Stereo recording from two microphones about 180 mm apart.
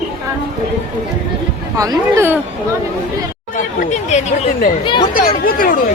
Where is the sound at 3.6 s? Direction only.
45° left (ahead or behind).